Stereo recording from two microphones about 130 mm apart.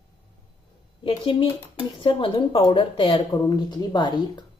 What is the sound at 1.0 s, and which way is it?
A woman's voice, 40° left (ahead or behind).